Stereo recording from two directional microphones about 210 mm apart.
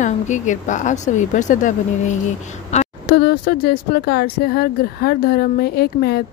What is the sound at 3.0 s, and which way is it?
Speech, 50° left (ahead or behind).